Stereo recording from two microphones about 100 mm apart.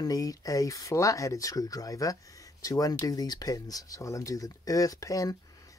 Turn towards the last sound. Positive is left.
turn(degrees=35)  # may be behind; listen again after turning